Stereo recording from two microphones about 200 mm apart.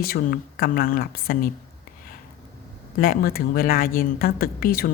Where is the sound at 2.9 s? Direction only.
45° left (ahead or behind).